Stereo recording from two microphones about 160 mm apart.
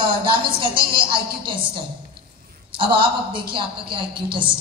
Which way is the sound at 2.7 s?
30° right (ahead or behind).